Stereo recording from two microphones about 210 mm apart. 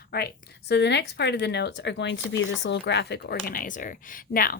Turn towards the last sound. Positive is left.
turn(degrees=45)  # may be behind; listen again after turning